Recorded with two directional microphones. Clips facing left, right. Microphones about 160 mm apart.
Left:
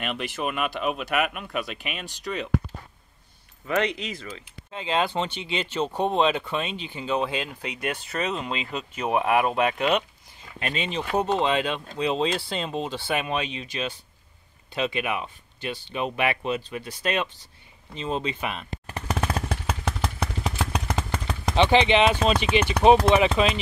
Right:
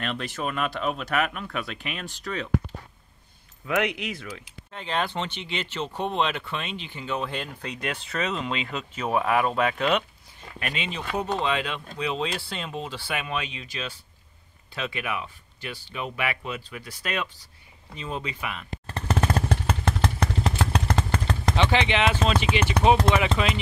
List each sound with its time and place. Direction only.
0.0 s speech: 10° left (ahead or behind)
3.6 s speech: centre (ahead or behind)
4.6 s speech: 10° left (ahead or behind)
10.6 s speech: 35° left (ahead or behind)
18.9 s a sound: 15° left (ahead or behind)
19.1 s motorcycle: centre (ahead or behind)
21.5 s speech: 20° left (ahead or behind)